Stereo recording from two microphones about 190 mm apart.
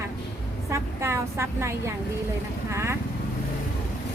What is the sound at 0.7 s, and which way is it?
A woman's voice, 15° right (ahead or behind).